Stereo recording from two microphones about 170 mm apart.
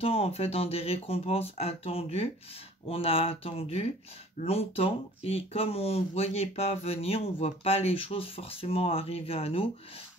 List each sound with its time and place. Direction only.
0.0 s speech: 35° left (ahead or behind)